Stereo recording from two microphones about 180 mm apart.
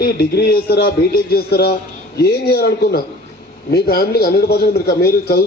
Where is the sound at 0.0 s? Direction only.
60° left (ahead or behind).